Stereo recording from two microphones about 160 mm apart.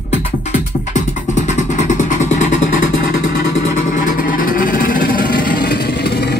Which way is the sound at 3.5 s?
50° left (ahead or behind).